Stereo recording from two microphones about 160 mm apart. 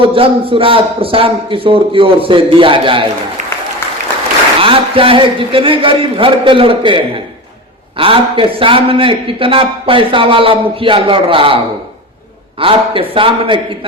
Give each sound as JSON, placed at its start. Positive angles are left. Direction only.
{"t": 0.0, "sound": "a man's voice", "side_deg": -35}
{"t": 4.6, "sound": "a man's voice", "side_deg": -35}